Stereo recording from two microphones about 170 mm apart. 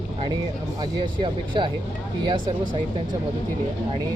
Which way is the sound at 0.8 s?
30° right (ahead or behind).